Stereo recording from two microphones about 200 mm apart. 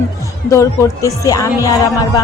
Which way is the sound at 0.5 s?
15° left (ahead or behind).